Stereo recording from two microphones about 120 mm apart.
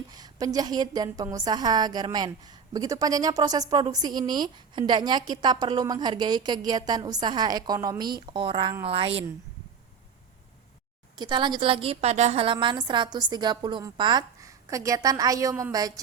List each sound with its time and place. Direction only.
0.1 s a woman's voice: 30° right (ahead or behind); by 9.2 s 50° right (ahead or behind)
11.2 s a woman's voice: 40° right (ahead or behind); by 12.4 s 70° right (ahead or behind)
12.4 s a woman's voice: 45° right (ahead or behind); by 15.6 s 25° right (ahead or behind)